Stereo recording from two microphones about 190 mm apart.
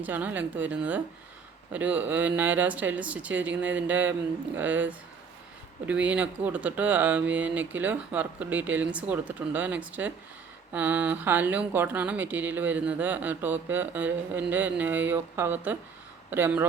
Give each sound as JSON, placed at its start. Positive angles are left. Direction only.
{"t": 0.0, "sound": "speech", "side_deg": -10}